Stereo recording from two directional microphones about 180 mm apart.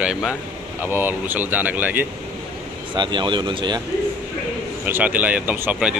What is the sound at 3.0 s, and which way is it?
Speech, 25° right (ahead or behind).